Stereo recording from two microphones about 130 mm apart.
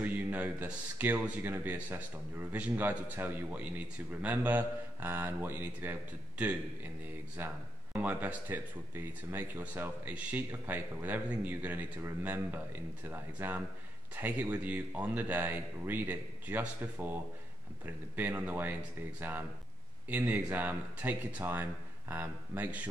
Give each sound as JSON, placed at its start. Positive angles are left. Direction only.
{"t": 0.0, "sound": "speech", "side_deg": -10}